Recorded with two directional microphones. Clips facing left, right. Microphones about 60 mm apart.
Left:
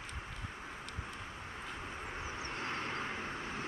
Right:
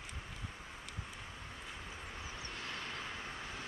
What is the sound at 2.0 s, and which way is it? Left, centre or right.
Vehicle, left.